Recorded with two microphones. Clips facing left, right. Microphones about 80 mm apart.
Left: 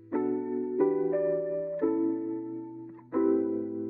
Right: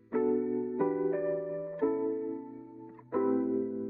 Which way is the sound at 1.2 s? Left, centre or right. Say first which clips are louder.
Left 4 dB; centre.